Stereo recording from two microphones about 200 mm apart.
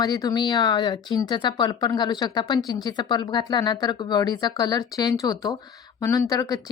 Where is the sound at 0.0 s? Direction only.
20° left (ahead or behind).